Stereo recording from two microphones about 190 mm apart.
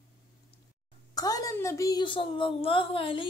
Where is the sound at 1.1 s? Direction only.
20° left (ahead or behind).